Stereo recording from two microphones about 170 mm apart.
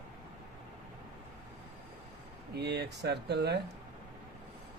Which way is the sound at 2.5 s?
75° right (ahead or behind).